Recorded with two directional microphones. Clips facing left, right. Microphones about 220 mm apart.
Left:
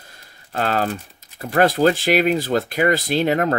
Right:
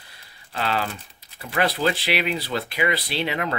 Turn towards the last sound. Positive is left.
turn(degrees=45)  # may be behind; listen again after turning